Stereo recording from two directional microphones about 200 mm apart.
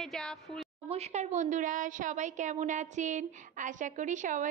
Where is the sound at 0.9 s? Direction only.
35° right (ahead or behind).